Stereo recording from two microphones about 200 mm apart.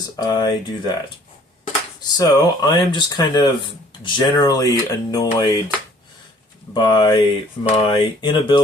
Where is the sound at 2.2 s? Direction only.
20° left (ahead or behind).